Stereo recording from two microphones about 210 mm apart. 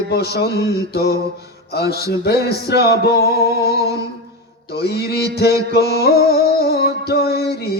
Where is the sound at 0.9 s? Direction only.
50° left (ahead or behind).